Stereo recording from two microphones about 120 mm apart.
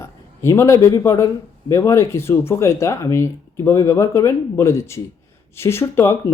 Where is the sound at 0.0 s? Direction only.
25° left (ahead or behind).